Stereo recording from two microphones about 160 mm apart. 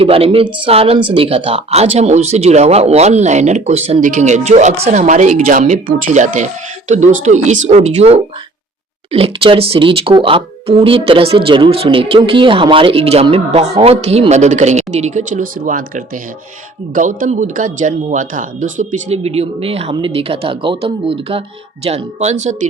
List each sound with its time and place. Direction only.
0.0 s speech: 35° right (ahead or behind)